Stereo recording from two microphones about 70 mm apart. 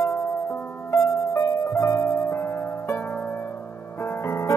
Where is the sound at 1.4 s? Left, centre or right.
Left.